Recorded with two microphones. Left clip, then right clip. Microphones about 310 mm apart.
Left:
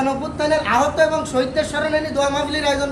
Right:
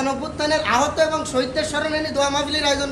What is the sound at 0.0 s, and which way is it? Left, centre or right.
A man's voice, centre.